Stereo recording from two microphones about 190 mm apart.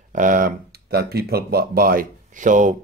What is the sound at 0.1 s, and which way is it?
Speech, 45° right (ahead or behind).